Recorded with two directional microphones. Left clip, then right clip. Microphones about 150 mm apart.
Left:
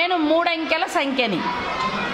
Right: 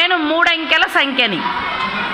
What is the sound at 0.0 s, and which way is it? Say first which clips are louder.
A woman's voice: right 5 dB; 15° left (ahead or behind).